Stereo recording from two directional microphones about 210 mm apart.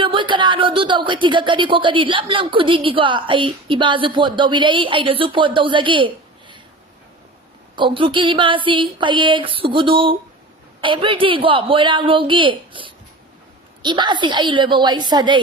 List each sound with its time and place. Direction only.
0.0 s speech: 25° right (ahead or behind)
7.8 s speech: 25° right (ahead or behind)